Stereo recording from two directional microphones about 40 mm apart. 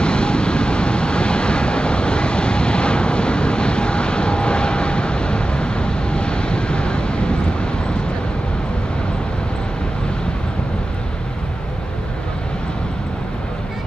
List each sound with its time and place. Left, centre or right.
0.0 s vehicle: left